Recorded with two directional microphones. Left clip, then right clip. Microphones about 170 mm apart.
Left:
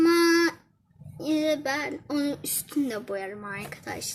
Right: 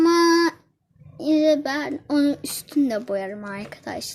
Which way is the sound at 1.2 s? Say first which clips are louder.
Right 7 dB; 45° right (ahead or behind).